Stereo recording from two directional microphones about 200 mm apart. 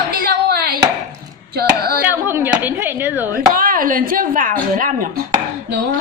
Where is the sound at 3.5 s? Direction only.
45° right (ahead or behind).